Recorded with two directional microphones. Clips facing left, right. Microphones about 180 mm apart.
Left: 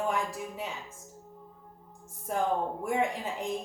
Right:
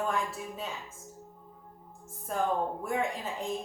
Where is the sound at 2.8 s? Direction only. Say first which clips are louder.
Left 2 dB; 15° left (ahead or behind).